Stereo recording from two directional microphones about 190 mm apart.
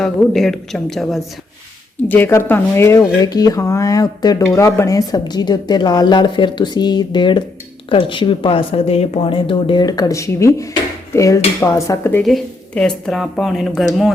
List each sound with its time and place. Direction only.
0.0 s speech: centre (ahead or behind)
12.2 s speech: centre (ahead or behind)